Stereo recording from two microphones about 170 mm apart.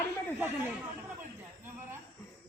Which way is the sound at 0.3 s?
10° right (ahead or behind).